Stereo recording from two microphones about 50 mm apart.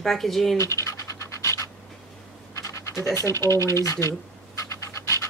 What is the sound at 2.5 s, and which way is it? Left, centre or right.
Pant, left.